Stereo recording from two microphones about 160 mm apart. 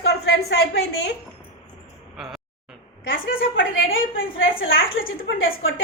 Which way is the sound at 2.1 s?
Centre (ahead or behind).